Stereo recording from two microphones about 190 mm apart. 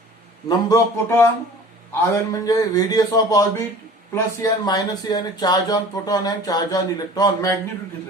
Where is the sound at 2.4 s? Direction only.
20° left (ahead or behind).